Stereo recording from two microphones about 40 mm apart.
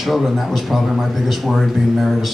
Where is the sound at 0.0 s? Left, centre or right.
Centre.